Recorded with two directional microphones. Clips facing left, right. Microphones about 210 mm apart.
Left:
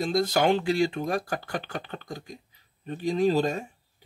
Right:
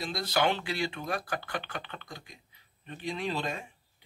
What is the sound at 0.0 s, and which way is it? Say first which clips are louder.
Speech: left 6 dB; 45° left (ahead or behind).